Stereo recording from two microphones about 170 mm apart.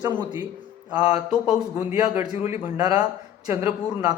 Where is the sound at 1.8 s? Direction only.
15° right (ahead or behind).